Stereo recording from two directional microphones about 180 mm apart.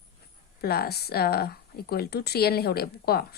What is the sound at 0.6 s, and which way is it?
Speech, 60° left (ahead or behind).